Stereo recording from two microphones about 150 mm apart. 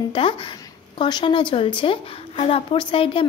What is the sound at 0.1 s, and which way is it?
A woman's voice, 35° left (ahead or behind).